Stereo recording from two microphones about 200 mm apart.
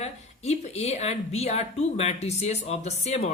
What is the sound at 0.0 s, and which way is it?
Speech, 35° left (ahead or behind).